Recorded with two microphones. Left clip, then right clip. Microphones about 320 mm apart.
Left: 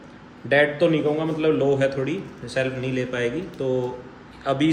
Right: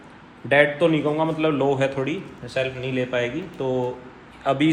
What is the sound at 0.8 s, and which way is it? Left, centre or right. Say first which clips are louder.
Speech: even; centre.